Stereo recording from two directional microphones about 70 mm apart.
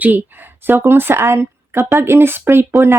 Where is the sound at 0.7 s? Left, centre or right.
Right.